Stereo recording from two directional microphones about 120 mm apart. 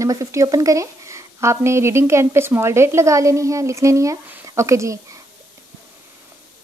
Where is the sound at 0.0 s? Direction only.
25° right (ahead or behind).